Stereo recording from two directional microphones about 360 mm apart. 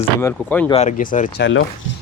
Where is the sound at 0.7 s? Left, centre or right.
Centre.